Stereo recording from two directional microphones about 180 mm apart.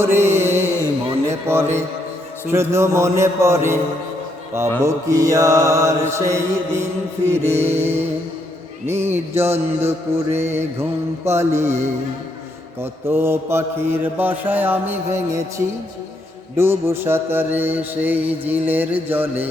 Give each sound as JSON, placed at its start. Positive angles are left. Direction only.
{"t": 0.0, "sound": "mantra", "side_deg": -15}
{"t": 1.3, "sound": "music", "side_deg": -15}
{"t": 2.5, "sound": "mantra", "side_deg": -15}
{"t": 4.8, "sound": "mantra", "side_deg": -15}